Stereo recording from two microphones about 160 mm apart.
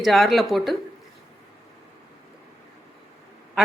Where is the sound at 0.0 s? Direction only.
Centre (ahead or behind).